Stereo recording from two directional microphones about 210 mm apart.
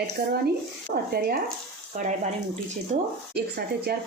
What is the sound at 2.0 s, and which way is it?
Speech, 35° right (ahead or behind).